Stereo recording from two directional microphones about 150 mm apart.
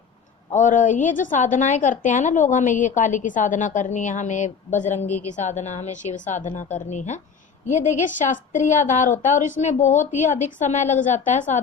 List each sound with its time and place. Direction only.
0.5 s a woman's voice: 60° left (ahead or behind)